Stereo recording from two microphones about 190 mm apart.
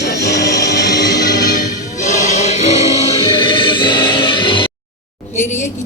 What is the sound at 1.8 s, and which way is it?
Choir, 40° left (ahead or behind).